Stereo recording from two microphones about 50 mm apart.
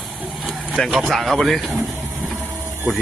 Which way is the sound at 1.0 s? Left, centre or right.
Centre.